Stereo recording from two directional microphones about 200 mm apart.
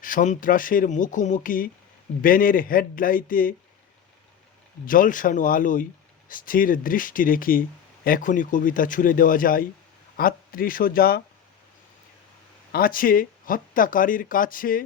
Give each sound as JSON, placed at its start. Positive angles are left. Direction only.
{"t": 0.0, "sound": "speech", "side_deg": 40}
{"t": 4.9, "sound": "speech", "side_deg": 45}
{"t": 12.7, "sound": "speech", "side_deg": 45}